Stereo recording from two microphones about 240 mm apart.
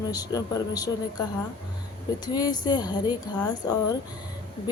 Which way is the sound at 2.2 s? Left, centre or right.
Centre.